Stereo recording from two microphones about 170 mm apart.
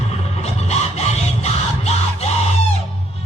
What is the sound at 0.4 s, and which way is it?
Music, 40° left (ahead or behind).